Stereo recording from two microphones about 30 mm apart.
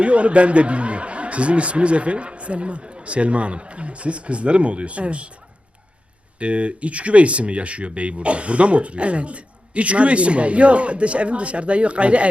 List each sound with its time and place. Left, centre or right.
0.0 s speech: right
6.4 s speech: right